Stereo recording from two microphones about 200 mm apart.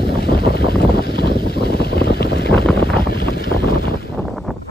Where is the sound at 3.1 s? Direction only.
50° left (ahead or behind).